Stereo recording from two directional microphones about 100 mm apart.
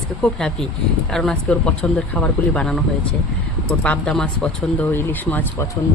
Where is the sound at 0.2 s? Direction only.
5° left (ahead or behind).